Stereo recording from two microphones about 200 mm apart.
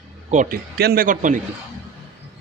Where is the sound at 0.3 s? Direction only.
40° right (ahead or behind).